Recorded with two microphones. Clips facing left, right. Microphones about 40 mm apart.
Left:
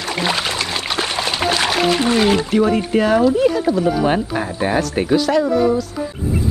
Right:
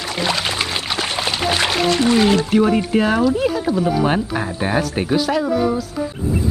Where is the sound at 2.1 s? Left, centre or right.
Centre.